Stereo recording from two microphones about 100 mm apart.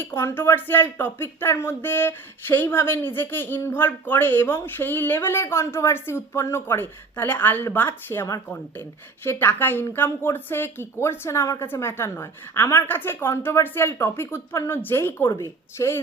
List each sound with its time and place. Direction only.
0.0 s speech: 25° left (ahead or behind)